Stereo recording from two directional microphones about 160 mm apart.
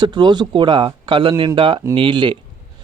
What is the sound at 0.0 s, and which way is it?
Speech, 30° right (ahead or behind).